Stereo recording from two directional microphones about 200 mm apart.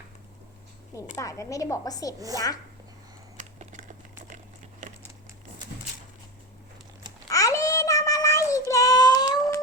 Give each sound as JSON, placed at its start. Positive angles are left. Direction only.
{"t": 1.1, "sound": "a woman's voice", "side_deg": 15}
{"t": 2.1, "sound": "a woman's voice", "side_deg": -15}
{"t": 3.3, "sound": "a sound", "side_deg": -40}
{"t": 4.8, "sound": "crumpling", "side_deg": -35}
{"t": 7.3, "sound": "child singing", "side_deg": 15}